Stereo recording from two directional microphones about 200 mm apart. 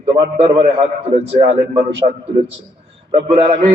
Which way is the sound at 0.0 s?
30° right (ahead or behind).